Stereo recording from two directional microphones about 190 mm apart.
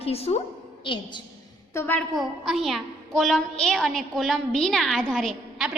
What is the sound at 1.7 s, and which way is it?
Speech, 10° left (ahead or behind).